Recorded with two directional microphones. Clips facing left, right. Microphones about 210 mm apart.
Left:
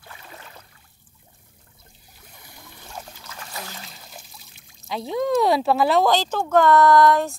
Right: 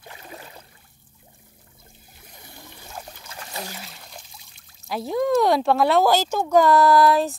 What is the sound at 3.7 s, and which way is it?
Speech, 5° right (ahead or behind).